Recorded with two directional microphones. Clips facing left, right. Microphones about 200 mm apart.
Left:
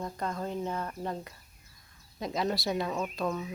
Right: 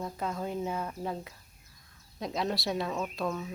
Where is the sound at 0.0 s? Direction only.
5° right (ahead or behind).